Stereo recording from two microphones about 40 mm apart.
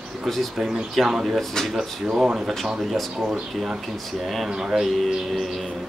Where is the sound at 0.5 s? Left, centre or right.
Centre.